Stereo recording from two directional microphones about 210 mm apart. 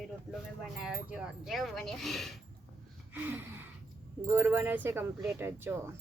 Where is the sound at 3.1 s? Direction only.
10° right (ahead or behind).